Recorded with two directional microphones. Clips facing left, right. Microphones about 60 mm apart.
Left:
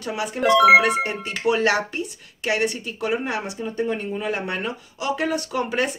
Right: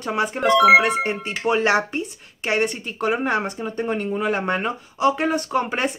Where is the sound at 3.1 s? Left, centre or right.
Right.